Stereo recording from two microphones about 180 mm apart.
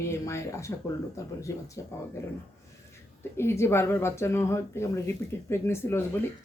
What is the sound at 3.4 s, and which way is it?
Speech, 15° left (ahead or behind).